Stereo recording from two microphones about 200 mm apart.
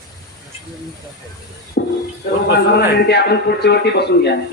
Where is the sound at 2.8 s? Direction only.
55° left (ahead or behind).